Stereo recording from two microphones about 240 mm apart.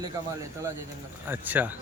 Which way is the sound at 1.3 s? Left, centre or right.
Centre.